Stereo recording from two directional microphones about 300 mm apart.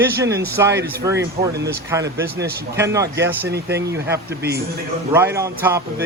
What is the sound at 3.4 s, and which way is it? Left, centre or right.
Speech, right.